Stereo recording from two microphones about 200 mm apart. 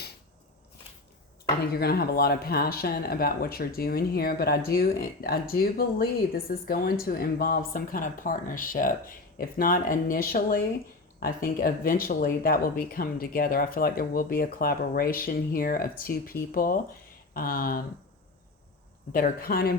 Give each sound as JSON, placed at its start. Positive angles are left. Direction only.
{"t": 1.7, "sound": "speech", "side_deg": 50}
{"t": 19.1, "sound": "speech", "side_deg": 45}